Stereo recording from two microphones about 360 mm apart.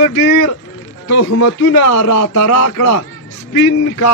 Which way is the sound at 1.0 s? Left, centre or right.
Left.